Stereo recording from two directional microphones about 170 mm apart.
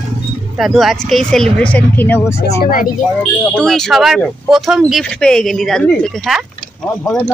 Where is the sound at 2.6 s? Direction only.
55° left (ahead or behind).